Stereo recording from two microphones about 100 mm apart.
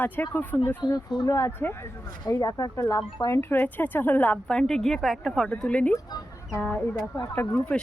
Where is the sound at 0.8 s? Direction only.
45° left (ahead or behind).